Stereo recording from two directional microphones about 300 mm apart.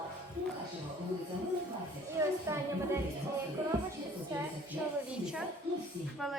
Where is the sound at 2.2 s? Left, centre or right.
Centre.